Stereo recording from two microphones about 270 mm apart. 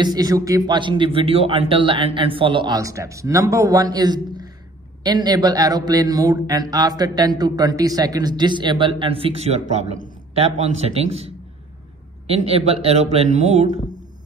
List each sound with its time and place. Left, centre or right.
0.0 s a man's voice: centre